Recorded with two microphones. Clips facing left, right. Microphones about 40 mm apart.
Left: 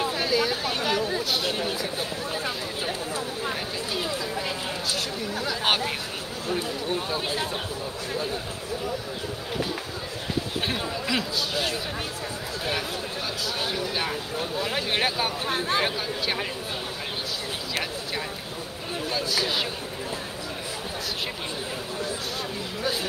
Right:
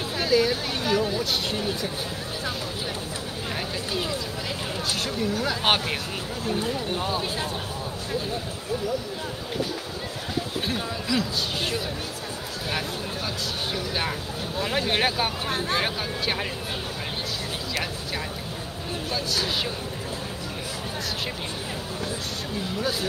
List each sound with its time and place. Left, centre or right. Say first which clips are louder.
0.2 s speech: right 7 dB; centre
5.4 s speech: even; centre
10.7 s speech: right 1 dB; left
14.6 s speech: right 3 dB; centre
15.5 s speech: left 3 dB; centre
19.0 s speech: left 1 dB; centre